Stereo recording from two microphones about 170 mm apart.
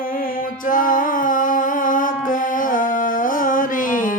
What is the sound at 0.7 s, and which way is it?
Music, 50° left (ahead or behind).